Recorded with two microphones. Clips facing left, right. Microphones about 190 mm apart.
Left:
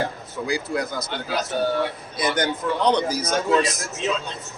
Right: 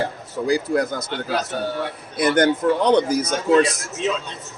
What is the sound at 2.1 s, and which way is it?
A man's voice, 55° right (ahead or behind).